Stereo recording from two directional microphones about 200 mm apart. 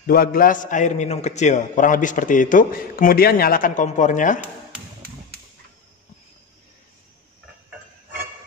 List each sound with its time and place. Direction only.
0.0 s a man's voice: 45° left (ahead or behind)